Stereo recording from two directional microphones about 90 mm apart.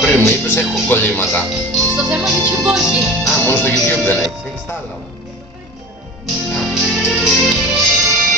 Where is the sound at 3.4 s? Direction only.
20° left (ahead or behind).